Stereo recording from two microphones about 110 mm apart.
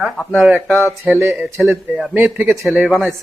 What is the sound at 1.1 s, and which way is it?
Speech, 20° right (ahead or behind).